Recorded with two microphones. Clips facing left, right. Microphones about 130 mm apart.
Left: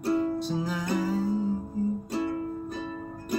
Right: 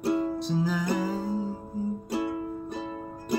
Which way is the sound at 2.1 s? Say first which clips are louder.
Even; 10° right (ahead or behind).